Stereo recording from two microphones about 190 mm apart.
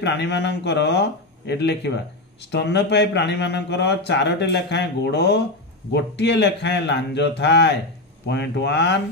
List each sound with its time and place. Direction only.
0.0 s speech: 65° left (ahead or behind)